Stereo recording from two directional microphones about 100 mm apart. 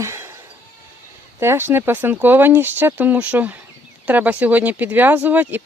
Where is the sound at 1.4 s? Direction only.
25° right (ahead or behind).